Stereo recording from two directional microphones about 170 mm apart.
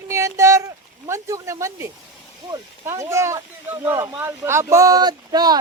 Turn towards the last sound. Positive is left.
turn(degrees=-25)  # may be behind; listen again after turning